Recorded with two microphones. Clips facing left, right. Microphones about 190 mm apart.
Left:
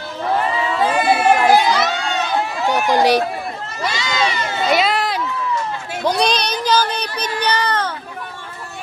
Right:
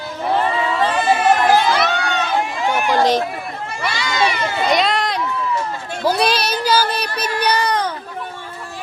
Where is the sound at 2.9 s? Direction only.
15° left (ahead or behind).